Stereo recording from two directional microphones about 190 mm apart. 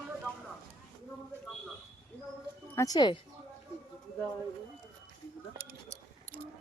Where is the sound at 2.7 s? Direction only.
20° left (ahead or behind).